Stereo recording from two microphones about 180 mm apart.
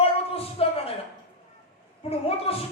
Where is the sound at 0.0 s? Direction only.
35° left (ahead or behind).